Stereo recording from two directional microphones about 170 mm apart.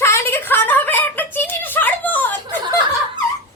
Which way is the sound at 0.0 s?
15° left (ahead or behind).